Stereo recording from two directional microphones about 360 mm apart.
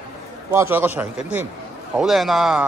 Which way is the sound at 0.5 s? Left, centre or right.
Centre.